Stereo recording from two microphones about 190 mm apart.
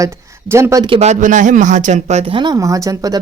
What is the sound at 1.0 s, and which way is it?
Speech, 40° right (ahead or behind).